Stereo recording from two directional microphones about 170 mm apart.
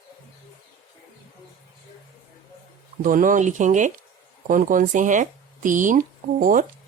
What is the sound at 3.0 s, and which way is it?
Speech, 50° right (ahead or behind).